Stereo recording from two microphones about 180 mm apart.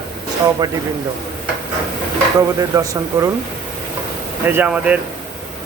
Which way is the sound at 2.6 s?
20° right (ahead or behind).